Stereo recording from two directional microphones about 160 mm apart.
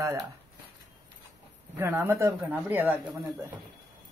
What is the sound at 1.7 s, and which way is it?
Speech, 15° right (ahead or behind).